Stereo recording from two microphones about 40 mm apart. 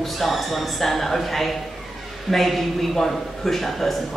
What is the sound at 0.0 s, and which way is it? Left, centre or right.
Speech, centre.